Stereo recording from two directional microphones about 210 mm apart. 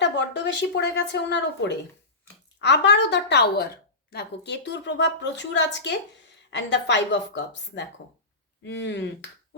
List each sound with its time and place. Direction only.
0.0 s a woman's voice: 60° left (ahead or behind)